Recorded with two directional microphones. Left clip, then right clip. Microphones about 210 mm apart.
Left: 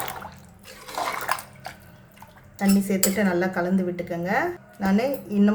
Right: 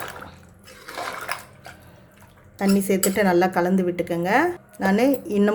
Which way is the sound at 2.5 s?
35° right (ahead or behind).